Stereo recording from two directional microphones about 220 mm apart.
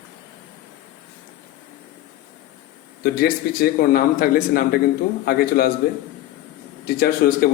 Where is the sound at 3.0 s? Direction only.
45° left (ahead or behind).